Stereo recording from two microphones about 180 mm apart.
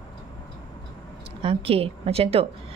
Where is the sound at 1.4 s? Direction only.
30° right (ahead or behind).